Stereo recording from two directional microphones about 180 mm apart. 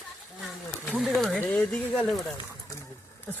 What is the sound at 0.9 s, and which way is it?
Speech, centre (ahead or behind).